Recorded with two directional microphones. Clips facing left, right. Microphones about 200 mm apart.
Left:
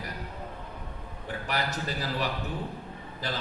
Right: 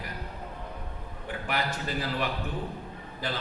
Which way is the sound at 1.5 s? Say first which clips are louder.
Even; 40° left (ahead or behind).